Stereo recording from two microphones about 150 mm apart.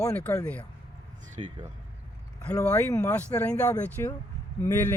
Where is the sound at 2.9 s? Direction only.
20° left (ahead or behind).